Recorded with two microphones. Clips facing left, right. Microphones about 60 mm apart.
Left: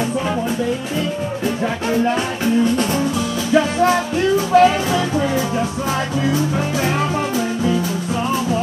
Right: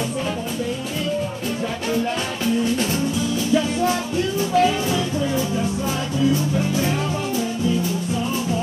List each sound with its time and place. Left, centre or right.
1.9 s music: left
3.2 s music: left